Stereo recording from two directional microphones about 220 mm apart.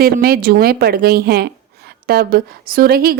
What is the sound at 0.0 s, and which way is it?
A woman's voice, 45° right (ahead or behind).